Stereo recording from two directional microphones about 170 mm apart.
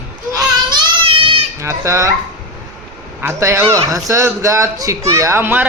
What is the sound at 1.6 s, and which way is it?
Speech, 15° right (ahead or behind).